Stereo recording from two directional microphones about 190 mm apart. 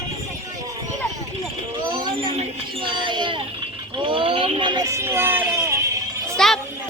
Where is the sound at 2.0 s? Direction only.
25° right (ahead or behind).